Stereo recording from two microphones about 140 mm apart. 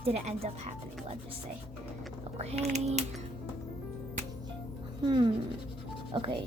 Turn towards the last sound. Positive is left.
turn(degrees=-35)  # may be behind; listen again after turning